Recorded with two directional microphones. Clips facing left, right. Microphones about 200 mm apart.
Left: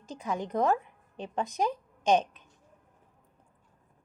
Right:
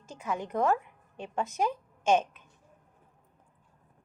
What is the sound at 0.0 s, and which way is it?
A woman's voice, 15° left (ahead or behind).